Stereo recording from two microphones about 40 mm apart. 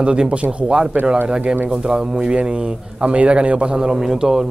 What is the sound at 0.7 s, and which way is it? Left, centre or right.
Speech, centre.